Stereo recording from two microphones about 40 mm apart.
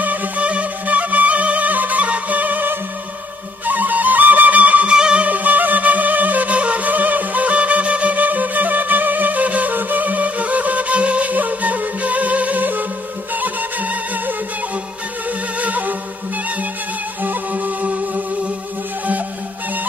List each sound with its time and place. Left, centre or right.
0.0 s music: right
4.8 s music: right
5.2 s music: right
15.6 s music: right
17.2 s music: right